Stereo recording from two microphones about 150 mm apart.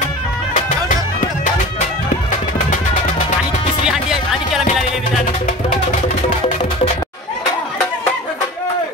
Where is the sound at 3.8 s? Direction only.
5° right (ahead or behind).